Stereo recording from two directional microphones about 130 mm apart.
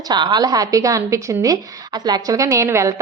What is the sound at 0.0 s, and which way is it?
A woman's voice, 35° right (ahead or behind).